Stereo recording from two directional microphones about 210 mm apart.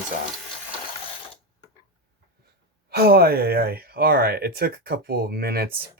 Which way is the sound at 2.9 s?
45° right (ahead or behind).